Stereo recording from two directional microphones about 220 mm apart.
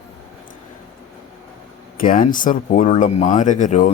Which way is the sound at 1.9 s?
35° left (ahead or behind).